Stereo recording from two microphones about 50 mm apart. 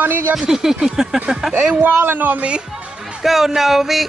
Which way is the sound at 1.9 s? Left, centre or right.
Right.